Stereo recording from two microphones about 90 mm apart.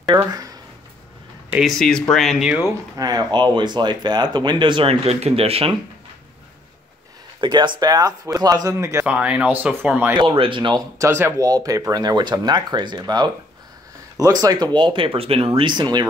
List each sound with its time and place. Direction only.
0.1 s speech: 25° right (ahead or behind)
1.6 s speech: 5° left (ahead or behind)
3.0 s speech: 50° right (ahead or behind); by 5.8 s 90° right
7.3 s speech: 55° right (ahead or behind); by 9.0 s 35° right (ahead or behind)
9.0 s speech: 15° right (ahead or behind)
10.1 s speech: 70° right (ahead or behind)
11.0 s speech: 30° right (ahead or behind)
11.4 s speech: 40° right (ahead or behind); by 15.7 s 90° right
15.7 s speech: 55° right (ahead or behind)